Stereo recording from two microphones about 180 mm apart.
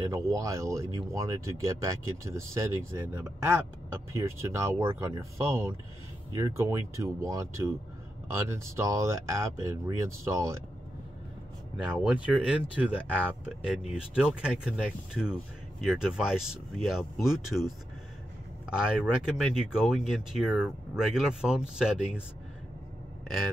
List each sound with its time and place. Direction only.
0.0 s speech: 15° right (ahead or behind)
11.7 s speech: 5° right (ahead or behind)
15.8 s speech: centre (ahead or behind)
18.7 s speech: 5° right (ahead or behind)